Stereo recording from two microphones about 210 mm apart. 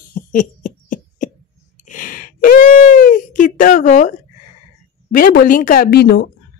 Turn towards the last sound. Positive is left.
turn(degrees=50)  # may be behind; listen again after turning